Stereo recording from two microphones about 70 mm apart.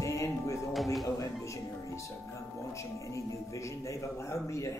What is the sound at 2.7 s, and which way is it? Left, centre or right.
Speech, left.